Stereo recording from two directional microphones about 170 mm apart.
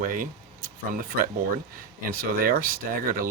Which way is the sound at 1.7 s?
60° right (ahead or behind).